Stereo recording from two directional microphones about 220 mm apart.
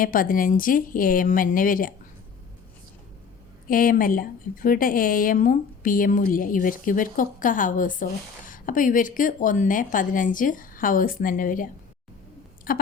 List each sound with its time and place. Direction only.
0.0 s a woman's voice: 40° left (ahead or behind)
3.7 s a woman's voice: 40° left (ahead or behind)